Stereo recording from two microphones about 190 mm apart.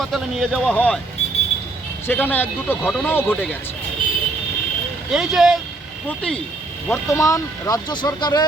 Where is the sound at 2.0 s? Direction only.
10° left (ahead or behind).